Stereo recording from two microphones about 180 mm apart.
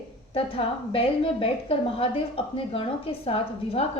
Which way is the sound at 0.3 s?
35° left (ahead or behind).